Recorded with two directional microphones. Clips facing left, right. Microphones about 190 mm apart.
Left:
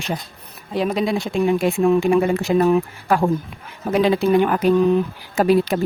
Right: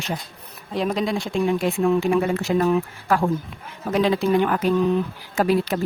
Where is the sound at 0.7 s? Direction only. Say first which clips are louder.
Left 3 dB; 5° left (ahead or behind).